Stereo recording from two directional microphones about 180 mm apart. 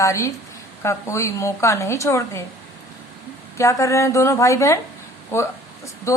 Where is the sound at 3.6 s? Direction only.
15° left (ahead or behind).